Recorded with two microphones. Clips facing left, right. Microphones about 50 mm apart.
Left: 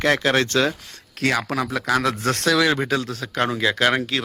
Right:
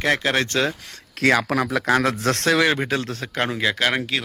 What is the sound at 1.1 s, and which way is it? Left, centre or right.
A man's voice, right.